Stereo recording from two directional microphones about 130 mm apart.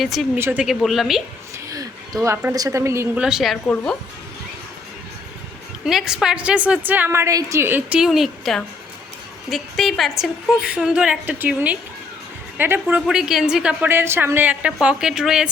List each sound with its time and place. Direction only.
0.0 s speech: centre (ahead or behind)
0.3 s a woman's voice: 20° right (ahead or behind)
0.6 s speech: centre (ahead or behind)
1.5 s a sound: 25° right (ahead or behind)
2.5 s a woman's voice: 25° right (ahead or behind)
3.2 s speech: 5° right (ahead or behind)
5.8 s a woman's voice: 5° right (ahead or behind)
13.1 s a woman's voice: 5° right (ahead or behind)